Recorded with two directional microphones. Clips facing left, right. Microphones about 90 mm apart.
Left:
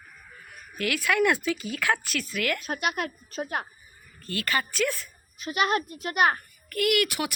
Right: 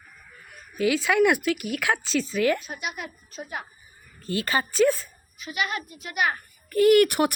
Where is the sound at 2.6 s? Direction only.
60° left (ahead or behind).